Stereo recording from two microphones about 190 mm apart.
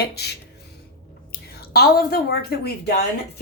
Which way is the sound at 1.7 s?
55° left (ahead or behind).